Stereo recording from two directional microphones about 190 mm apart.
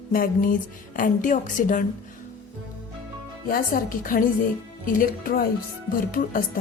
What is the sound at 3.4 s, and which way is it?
Speech, 45° left (ahead or behind).